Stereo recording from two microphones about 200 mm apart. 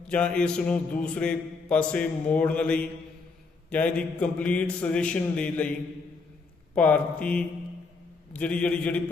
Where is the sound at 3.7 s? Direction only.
5° left (ahead or behind).